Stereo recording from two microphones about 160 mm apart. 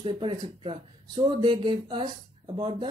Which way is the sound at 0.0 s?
30° right (ahead or behind).